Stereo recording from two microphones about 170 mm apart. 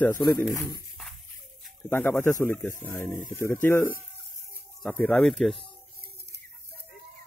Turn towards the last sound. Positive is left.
turn(degrees=0)  # may be behind; listen again after turning